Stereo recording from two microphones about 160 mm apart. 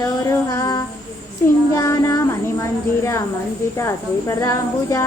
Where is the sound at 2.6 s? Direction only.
15° left (ahead or behind).